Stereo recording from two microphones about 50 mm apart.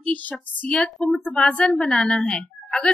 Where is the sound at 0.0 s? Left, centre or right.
Left.